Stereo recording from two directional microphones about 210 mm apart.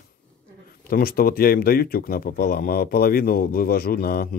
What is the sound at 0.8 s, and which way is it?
Speech, 45° left (ahead or behind).